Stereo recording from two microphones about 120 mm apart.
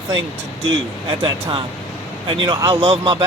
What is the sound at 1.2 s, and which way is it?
Speech, 45° right (ahead or behind).